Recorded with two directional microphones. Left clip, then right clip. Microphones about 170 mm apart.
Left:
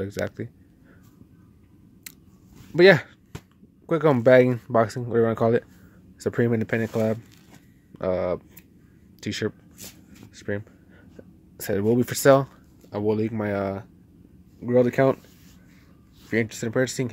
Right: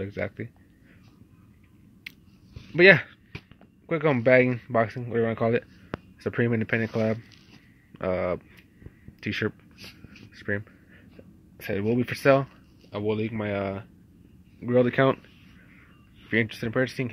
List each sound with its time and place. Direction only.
0.1 s speech: 25° left (ahead or behind)
2.7 s speech: 35° left (ahead or behind)
3.8 s speech: 45° left (ahead or behind)
6.2 s speech: 30° left (ahead or behind)
9.2 s a sound: 15° left (ahead or behind)
11.5 s speech: 40° left (ahead or behind)
14.6 s speech: 20° left (ahead or behind)
16.3 s speech: 20° left (ahead or behind)